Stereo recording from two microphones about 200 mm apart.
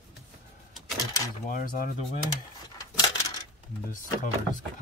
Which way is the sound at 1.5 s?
45° left (ahead or behind).